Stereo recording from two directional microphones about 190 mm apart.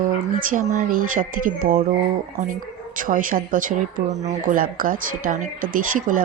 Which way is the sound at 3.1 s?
45° right (ahead or behind).